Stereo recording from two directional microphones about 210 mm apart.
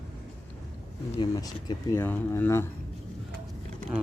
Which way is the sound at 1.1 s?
20° left (ahead or behind).